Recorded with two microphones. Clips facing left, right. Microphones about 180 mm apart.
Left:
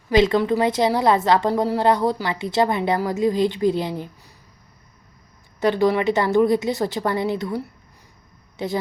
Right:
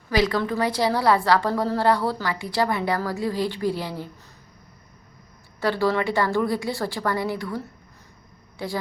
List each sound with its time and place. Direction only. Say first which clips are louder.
0.1 s a woman's voice: left 5 dB; 20° left (ahead or behind)
5.5 s a woman's voice: left 4 dB; 20° left (ahead or behind)